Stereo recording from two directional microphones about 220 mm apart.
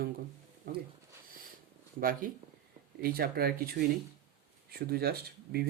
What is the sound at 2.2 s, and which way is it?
Speech, 40° right (ahead or behind).